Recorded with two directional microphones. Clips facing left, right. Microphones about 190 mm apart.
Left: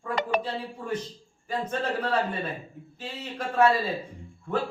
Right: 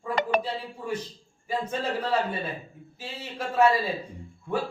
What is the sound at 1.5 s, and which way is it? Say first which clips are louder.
Speech: even; 10° right (ahead or behind).